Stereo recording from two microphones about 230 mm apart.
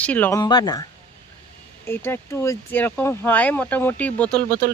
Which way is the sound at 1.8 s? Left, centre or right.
Centre.